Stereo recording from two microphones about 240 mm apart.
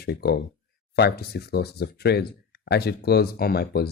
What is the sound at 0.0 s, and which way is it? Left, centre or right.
Speech, left.